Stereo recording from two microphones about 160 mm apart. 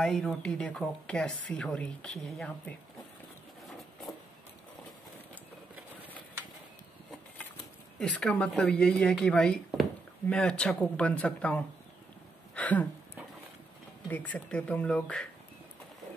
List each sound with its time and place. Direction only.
0.0 s speech: centre (ahead or behind)
8.0 s speech: 5° left (ahead or behind)
12.5 s a sound: 10° left (ahead or behind)
14.0 s speech: 10° left (ahead or behind)